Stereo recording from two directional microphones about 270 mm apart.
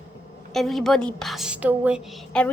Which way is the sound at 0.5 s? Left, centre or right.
Centre.